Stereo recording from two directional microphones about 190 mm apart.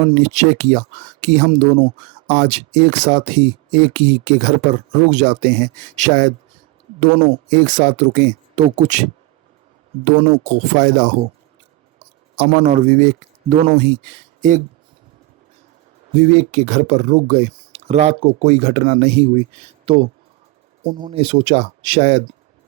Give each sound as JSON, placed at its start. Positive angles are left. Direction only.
{"t": 0.2, "sound": "speech", "side_deg": -40}
{"t": 1.6, "sound": "speech", "side_deg": -25}
{"t": 2.4, "sound": "speech", "side_deg": -40}
{"t": 7.1, "sound": "speech", "side_deg": -30}
{"t": 7.5, "sound": "speech", "side_deg": -40}
{"t": 10.1, "sound": "speech", "side_deg": -30}
{"t": 10.7, "sound": "speech", "side_deg": -45}
{"t": 12.4, "sound": "speech", "side_deg": -35}
{"t": 13.6, "sound": "speech", "side_deg": -30}
{"t": 13.8, "sound": "speech", "side_deg": -45}
{"t": 16.1, "sound": "speech", "side_deg": -35}